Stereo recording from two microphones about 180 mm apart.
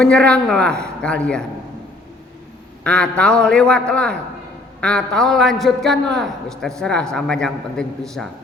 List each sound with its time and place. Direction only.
0.0 s a man's voice: 5° left (ahead or behind)
2.8 s a man's voice: 5° left (ahead or behind)